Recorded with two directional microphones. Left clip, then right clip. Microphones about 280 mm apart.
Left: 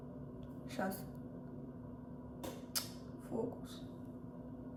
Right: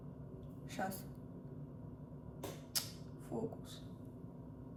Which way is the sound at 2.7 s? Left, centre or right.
Centre.